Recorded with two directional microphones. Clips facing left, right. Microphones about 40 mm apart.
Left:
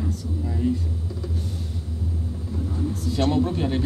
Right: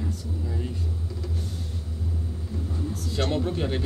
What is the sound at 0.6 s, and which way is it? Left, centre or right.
Speech, centre.